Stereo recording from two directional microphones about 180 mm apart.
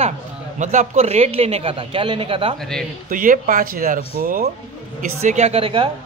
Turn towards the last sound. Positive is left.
turn(degrees=-30)  # may be behind; listen again after turning